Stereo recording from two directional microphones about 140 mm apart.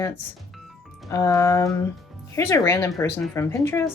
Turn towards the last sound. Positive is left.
turn(degrees=20)  # may be behind; listen again after turning